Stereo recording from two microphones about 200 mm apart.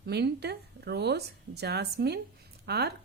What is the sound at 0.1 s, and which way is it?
Speech, 55° right (ahead or behind).